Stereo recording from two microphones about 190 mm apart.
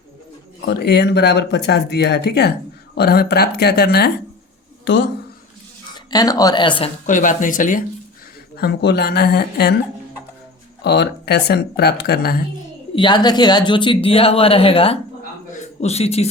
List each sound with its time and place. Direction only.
0.6 s speech: 60° left (ahead or behind)
5.9 s speech: 20° left (ahead or behind)
7.0 s speech: 40° left (ahead or behind)
8.5 s speech: 60° left (ahead or behind)
10.8 s speech: 60° left (ahead or behind)
13.0 s speech: 25° left (ahead or behind)